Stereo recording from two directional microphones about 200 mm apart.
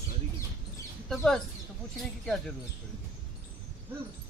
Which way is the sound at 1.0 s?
Centre (ahead or behind).